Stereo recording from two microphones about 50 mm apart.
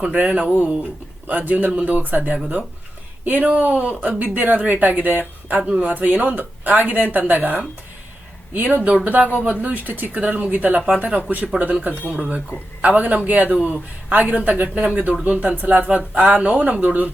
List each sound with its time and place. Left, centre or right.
0.1 s speech: right
1.3 s speech: right